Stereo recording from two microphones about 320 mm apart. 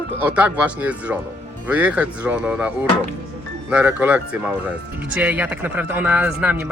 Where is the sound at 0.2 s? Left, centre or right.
Centre.